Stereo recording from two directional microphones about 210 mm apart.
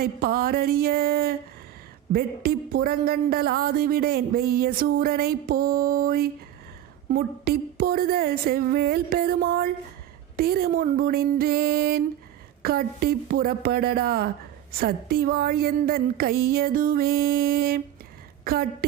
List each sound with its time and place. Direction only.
0.0 s a woman's voice: 45° right (ahead or behind)